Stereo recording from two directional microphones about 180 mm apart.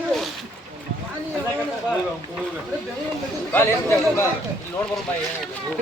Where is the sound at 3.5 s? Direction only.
15° left (ahead or behind).